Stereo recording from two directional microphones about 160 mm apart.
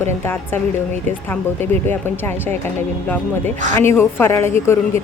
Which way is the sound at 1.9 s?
15° left (ahead or behind).